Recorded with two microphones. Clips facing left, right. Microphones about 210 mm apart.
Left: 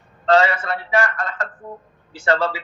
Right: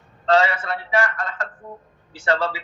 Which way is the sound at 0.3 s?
45° left (ahead or behind).